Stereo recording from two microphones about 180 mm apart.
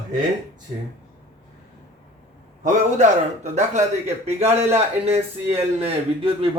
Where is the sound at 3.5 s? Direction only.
40° right (ahead or behind).